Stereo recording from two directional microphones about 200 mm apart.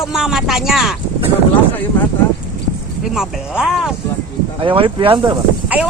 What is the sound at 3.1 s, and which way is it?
Speech, centre (ahead or behind).